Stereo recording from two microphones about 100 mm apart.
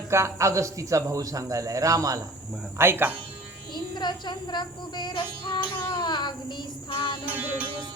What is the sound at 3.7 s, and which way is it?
Music, 45° left (ahead or behind).